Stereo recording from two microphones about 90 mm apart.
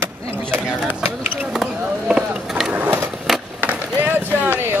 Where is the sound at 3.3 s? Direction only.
Centre (ahead or behind).